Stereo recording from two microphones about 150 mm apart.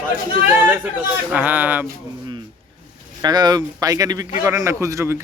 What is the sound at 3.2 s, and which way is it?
Speech, 25° right (ahead or behind).